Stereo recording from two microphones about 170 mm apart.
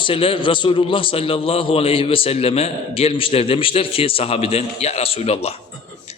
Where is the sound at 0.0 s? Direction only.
30° left (ahead or behind).